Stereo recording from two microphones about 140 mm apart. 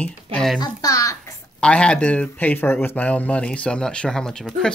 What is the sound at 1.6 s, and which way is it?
Speech, 5° left (ahead or behind).